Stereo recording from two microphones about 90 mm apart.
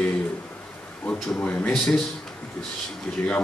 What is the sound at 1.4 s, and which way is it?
Speech, 10° left (ahead or behind).